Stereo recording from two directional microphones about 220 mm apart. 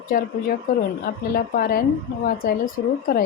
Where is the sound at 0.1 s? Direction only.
40° left (ahead or behind).